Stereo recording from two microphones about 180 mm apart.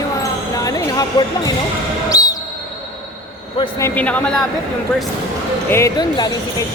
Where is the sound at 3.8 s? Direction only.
10° left (ahead or behind).